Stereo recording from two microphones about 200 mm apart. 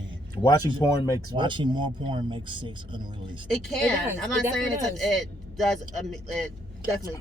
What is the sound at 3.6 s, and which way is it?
A man's voice, centre (ahead or behind).